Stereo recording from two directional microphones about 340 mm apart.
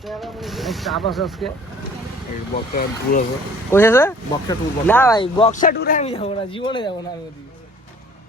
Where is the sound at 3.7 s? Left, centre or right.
Centre.